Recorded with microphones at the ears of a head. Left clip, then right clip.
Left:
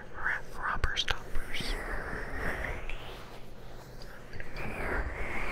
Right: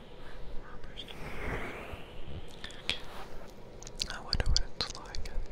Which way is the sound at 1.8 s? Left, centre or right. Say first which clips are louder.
Left 9 dB; left.